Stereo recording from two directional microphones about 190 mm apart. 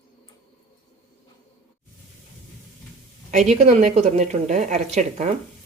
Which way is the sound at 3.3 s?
35° right (ahead or behind).